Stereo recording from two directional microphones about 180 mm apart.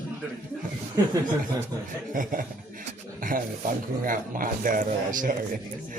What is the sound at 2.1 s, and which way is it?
Speech, 50° right (ahead or behind).